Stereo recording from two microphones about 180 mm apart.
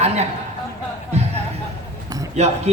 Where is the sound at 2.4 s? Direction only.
35° right (ahead or behind).